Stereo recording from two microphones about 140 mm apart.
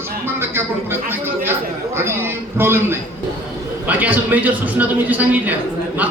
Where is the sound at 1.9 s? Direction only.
15° right (ahead or behind).